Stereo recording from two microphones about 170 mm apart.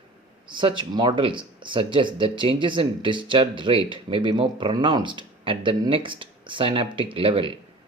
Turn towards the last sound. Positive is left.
turn(degrees=-30)  # may be behind; listen again after turning